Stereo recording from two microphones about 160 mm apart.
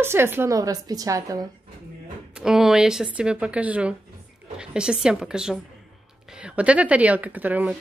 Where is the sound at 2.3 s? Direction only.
5° right (ahead or behind).